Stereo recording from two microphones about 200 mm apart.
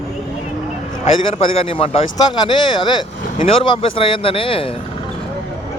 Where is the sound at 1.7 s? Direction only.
30° left (ahead or behind).